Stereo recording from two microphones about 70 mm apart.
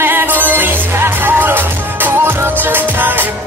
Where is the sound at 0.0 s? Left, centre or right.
Right.